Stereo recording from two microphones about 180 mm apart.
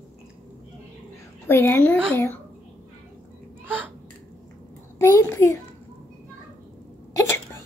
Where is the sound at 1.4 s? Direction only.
15° left (ahead or behind).